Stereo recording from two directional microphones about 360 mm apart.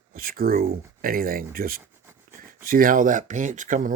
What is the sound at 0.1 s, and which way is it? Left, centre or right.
Speech, right.